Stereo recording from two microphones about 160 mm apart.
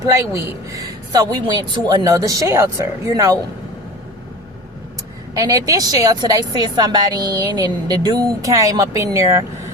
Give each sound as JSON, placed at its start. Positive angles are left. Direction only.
{"t": 0.0, "sound": "a woman's voice", "side_deg": -20}
{"t": 5.3, "sound": "a woman's voice", "side_deg": -20}